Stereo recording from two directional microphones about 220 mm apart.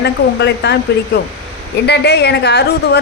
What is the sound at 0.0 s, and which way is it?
A woman's voice, 50° left (ahead or behind).